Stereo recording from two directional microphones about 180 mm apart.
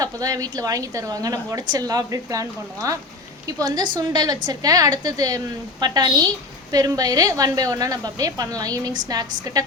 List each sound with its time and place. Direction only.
0.0 s a woman's voice: 20° right (ahead or behind)